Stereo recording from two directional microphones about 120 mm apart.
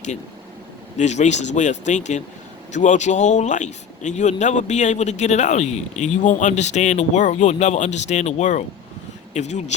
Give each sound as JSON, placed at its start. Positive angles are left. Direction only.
{"t": 0.9, "sound": "speech", "side_deg": 80}